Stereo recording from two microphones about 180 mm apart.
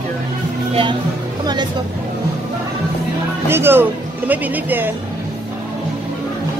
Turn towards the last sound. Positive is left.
turn(degrees=-10)  # may be behind; listen again after turning